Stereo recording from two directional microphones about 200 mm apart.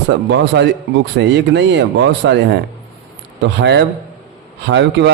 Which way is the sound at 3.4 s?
60° right (ahead or behind).